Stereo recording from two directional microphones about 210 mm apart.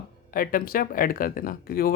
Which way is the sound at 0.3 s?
45° left (ahead or behind).